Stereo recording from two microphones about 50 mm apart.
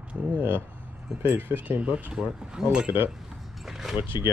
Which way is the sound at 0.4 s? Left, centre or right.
Right.